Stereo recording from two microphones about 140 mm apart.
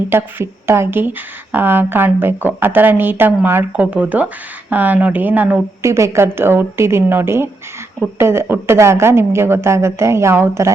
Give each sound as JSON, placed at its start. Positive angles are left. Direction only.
{"t": 0.1, "sound": "speech", "side_deg": -15}